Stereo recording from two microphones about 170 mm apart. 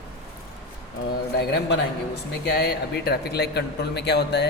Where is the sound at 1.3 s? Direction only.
75° left (ahead or behind).